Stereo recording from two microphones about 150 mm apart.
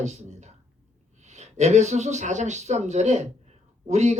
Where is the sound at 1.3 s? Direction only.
50° right (ahead or behind).